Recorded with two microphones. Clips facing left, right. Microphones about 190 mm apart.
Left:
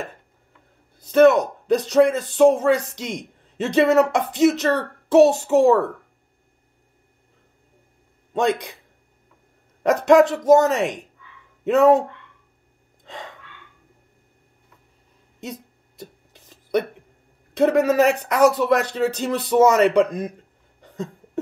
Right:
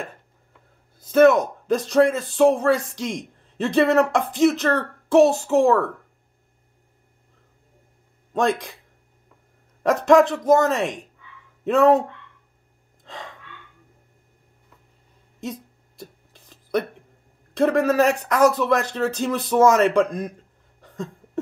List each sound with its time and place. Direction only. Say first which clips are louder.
1.1 s a woman's voice: left 1 dB; centre (ahead or behind)
9.8 s speech: left 1 dB; centre (ahead or behind)
16.0 s a sound: left 1 dB; centre (ahead or behind)
17.7 s a man's voice: left 1 dB; 5° left (ahead or behind)